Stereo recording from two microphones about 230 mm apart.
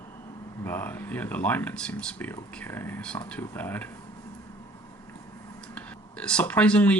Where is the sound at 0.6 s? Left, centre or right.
Centre.